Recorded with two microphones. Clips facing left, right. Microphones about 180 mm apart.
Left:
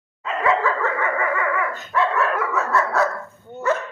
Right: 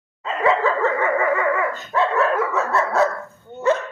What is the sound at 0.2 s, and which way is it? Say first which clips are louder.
Dog: right 2 dB; 30° right (ahead or behind).